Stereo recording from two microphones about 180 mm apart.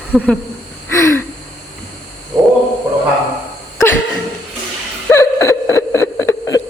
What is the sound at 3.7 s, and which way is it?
Cough, 15° left (ahead or behind).